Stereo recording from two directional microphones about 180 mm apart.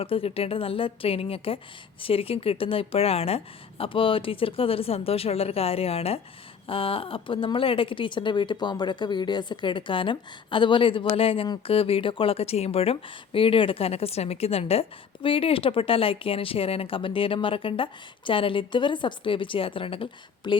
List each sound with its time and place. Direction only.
0.0 s a woman's voice: 30° left (ahead or behind)